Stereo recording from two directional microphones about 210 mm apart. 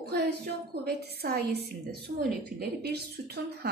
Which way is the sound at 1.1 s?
50° right (ahead or behind).